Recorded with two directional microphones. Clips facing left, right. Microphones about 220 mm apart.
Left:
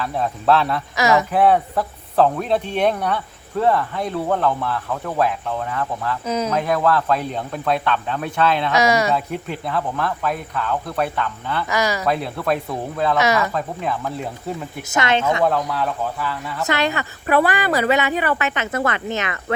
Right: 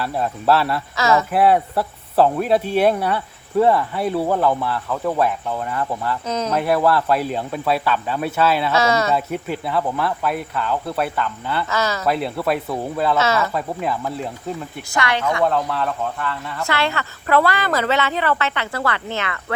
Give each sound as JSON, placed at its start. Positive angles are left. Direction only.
{"t": 0.0, "sound": "speech", "side_deg": -5}
{"t": 0.9, "sound": "speech", "side_deg": 15}
{"t": 1.3, "sound": "speech", "side_deg": -5}
{"t": 6.2, "sound": "speech", "side_deg": 10}
{"t": 6.5, "sound": "speech", "side_deg": -10}
{"t": 8.7, "sound": "speech", "side_deg": 15}
{"t": 9.1, "sound": "speech", "side_deg": -5}
{"t": 11.7, "sound": "speech", "side_deg": 15}
{"t": 12.0, "sound": "speech", "side_deg": -5}
{"t": 13.1, "sound": "speech", "side_deg": 15}
{"t": 13.5, "sound": "speech", "side_deg": -5}
{"t": 14.8, "sound": "speech", "side_deg": 20}
{"t": 15.4, "sound": "speech", "side_deg": 0}
{"t": 16.6, "sound": "speech", "side_deg": 20}